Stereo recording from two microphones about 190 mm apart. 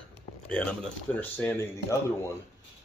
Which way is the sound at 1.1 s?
10° left (ahead or behind).